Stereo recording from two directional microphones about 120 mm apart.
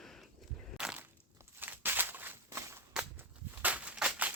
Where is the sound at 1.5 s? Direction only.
15° right (ahead or behind).